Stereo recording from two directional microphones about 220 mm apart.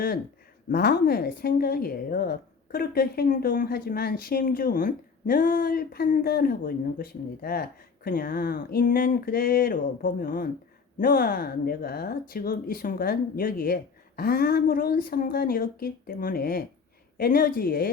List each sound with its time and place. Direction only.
0.7 s speech: 45° left (ahead or behind)